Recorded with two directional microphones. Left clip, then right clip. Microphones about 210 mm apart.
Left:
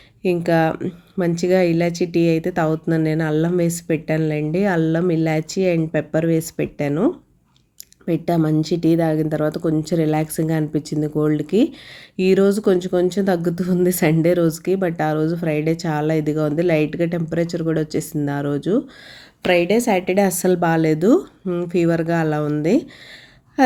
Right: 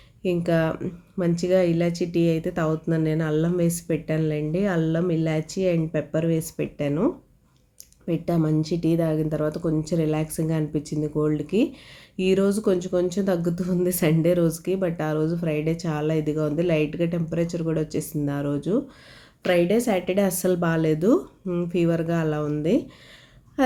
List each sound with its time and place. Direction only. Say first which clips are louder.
0.2 s speech: left 5 dB; 10° left (ahead or behind)